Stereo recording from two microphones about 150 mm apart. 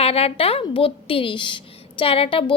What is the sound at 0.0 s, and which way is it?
A woman's voice, 40° left (ahead or behind).